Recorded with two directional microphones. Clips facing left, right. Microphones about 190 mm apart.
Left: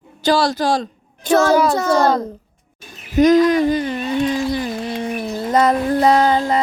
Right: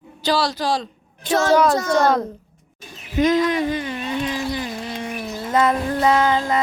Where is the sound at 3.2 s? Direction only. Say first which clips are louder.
Left 6 dB; 40° left (ahead or behind).